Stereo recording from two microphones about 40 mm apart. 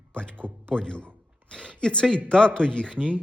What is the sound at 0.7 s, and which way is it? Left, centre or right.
Speech, centre.